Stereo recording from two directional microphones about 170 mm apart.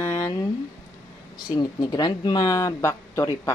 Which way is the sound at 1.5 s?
25° left (ahead or behind).